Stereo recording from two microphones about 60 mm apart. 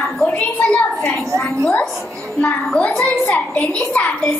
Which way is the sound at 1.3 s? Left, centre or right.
Right.